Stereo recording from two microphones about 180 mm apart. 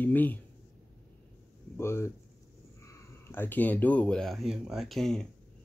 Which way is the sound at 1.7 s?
15° left (ahead or behind).